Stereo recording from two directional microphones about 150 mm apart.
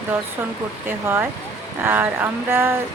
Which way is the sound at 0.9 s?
15° right (ahead or behind).